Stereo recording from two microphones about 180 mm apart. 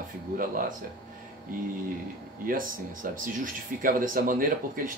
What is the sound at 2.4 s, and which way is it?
Speech, 50° right (ahead or behind).